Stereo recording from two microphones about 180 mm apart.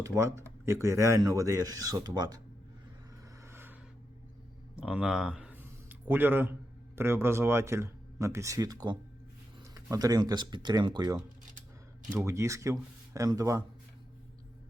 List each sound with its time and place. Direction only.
0.0 s speech: 15° right (ahead or behind)
3.4 s a sound: 10° right (ahead or behind)
6.9 s speech: 15° right (ahead or behind)